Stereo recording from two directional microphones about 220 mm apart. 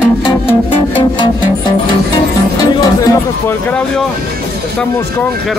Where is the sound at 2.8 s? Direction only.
15° left (ahead or behind).